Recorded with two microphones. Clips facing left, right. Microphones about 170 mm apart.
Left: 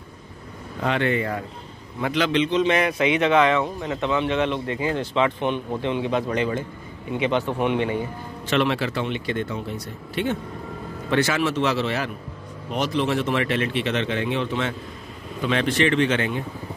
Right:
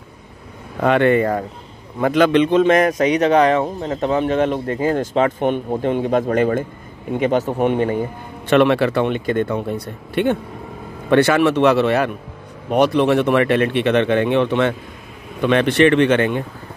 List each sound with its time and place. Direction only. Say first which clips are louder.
0.7 s a man's voice: right 8 dB; 55° right (ahead or behind)
8.5 s speech: right 8 dB; 60° right (ahead or behind)